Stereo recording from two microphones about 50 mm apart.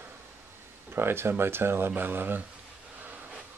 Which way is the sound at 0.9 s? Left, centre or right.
Right.